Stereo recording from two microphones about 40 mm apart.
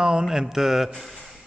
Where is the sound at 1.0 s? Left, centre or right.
Centre.